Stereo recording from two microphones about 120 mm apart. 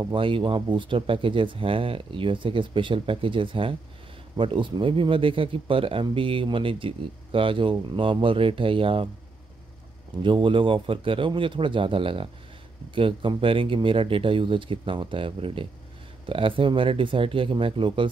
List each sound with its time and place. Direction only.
0.1 s speech: 45° right (ahead or behind)
10.2 s speech: 45° right (ahead or behind)